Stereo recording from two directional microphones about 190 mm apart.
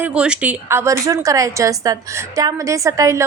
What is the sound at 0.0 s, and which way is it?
A woman's voice, 5° right (ahead or behind).